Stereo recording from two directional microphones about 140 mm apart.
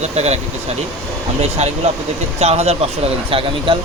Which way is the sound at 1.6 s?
55° right (ahead or behind).